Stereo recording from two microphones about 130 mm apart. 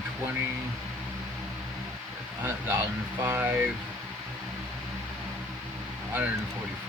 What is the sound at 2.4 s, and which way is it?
Speech, 20° right (ahead or behind).